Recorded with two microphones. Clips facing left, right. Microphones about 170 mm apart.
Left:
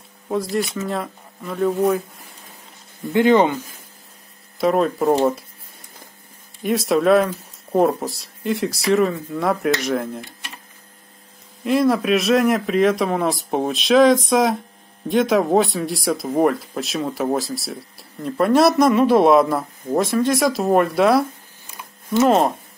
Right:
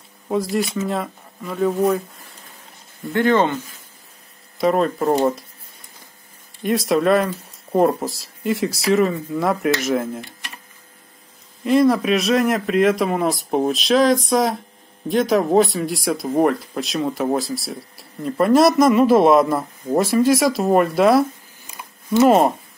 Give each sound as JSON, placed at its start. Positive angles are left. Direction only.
{"t": 0.3, "sound": "speech", "side_deg": 0}
{"t": 3.1, "sound": "speech", "side_deg": 15}
{"t": 4.6, "sound": "speech", "side_deg": 0}
{"t": 6.6, "sound": "speech", "side_deg": 0}
{"t": 11.6, "sound": "speech", "side_deg": 0}